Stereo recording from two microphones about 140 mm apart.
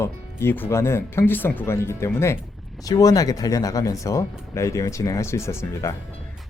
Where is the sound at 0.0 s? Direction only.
15° left (ahead or behind).